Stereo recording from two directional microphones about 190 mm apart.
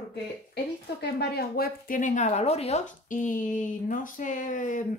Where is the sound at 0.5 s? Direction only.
60° left (ahead or behind).